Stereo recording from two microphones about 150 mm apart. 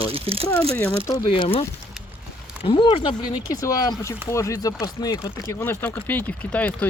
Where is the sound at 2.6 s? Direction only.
35° left (ahead or behind).